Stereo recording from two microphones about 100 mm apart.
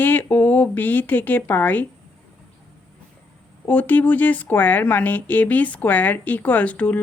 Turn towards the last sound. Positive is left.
turn(degrees=15)  # may be behind; listen again after turning